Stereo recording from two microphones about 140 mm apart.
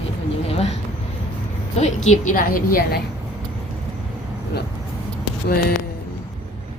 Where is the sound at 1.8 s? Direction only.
55° left (ahead or behind); by 2.9 s 90° left.